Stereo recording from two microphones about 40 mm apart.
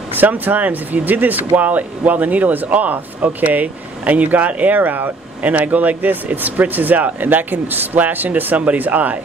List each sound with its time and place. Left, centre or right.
0.1 s speech: right